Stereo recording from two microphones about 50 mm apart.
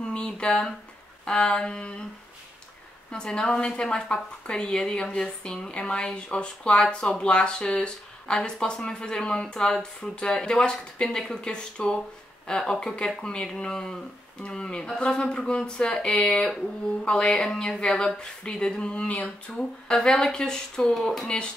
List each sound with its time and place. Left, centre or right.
0.0 s speech: centre
1.2 s a sound: centre
3.1 s speech: centre
19.5 s speech: centre